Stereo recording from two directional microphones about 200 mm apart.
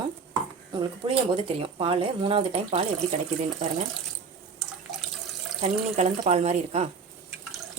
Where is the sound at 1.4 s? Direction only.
25° right (ahead or behind).